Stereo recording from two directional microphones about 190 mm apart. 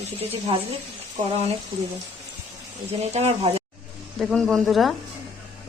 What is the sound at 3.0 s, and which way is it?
Speech, 35° right (ahead or behind).